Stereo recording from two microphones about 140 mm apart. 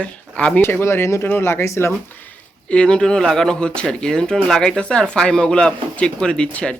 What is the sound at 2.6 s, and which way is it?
Speech, 5° left (ahead or behind).